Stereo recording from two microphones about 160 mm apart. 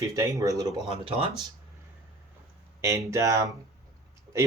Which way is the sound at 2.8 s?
15° right (ahead or behind).